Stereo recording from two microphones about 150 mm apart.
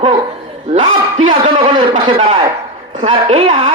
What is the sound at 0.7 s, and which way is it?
Speech, 55° right (ahead or behind).